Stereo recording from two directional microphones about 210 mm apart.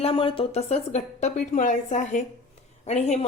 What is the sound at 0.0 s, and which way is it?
Speech, 25° left (ahead or behind).